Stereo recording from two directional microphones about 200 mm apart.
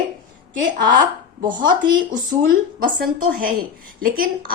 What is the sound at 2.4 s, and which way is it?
A woman's voice, 45° right (ahead or behind).